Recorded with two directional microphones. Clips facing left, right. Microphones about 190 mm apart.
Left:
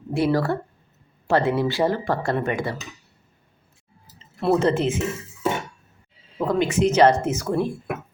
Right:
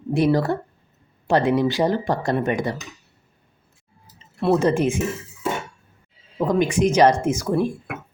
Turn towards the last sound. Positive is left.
turn(degrees=-10)  # may be behind; listen again after turning